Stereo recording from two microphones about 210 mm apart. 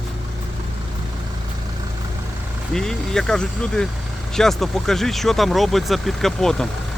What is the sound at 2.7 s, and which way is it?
Speech, centre (ahead or behind).